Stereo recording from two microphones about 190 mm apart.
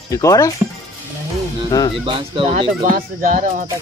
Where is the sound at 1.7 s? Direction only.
20° left (ahead or behind).